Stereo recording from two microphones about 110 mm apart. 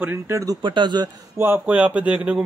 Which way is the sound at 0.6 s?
45° right (ahead or behind).